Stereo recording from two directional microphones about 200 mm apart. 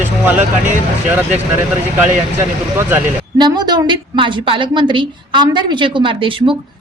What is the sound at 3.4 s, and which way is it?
A woman's voice, 20° right (ahead or behind).